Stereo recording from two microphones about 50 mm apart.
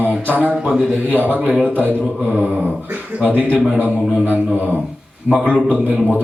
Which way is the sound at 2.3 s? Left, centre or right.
Right.